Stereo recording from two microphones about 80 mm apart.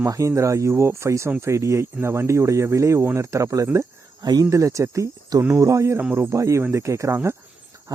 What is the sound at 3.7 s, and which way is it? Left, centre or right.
Speech, right.